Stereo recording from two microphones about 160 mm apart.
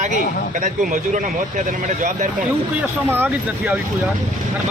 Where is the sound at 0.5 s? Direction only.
55° right (ahead or behind).